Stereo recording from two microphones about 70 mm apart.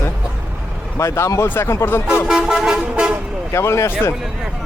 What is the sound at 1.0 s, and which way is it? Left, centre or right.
Speech, left.